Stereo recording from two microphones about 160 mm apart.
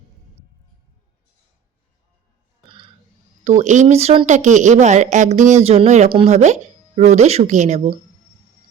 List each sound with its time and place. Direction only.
2.6 s burping: 30° right (ahead or behind)
3.4 s speech: 45° right (ahead or behind)
4.3 s speech: 50° right (ahead or behind)